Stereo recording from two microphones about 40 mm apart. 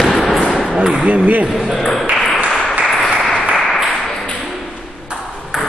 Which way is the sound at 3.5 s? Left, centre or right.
Centre.